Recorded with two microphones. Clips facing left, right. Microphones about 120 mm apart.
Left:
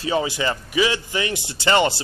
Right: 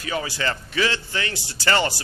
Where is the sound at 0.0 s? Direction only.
25° left (ahead or behind).